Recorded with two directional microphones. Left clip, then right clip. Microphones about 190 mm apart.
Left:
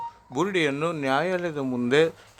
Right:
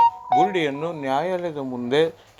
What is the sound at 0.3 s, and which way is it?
A man's voice, 15° left (ahead or behind).